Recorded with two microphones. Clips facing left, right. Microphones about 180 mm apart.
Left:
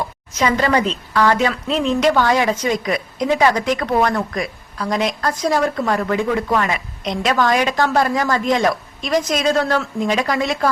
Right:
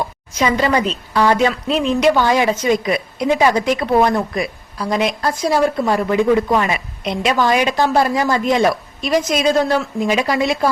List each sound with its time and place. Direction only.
0.3 s a woman's voice: 10° right (ahead or behind)